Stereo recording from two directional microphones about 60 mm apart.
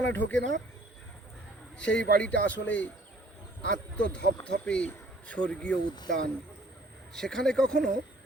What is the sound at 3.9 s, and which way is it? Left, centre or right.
Speech, centre.